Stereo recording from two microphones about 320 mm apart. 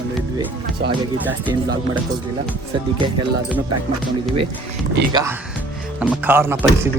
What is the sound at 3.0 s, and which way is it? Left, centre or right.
Speech, centre.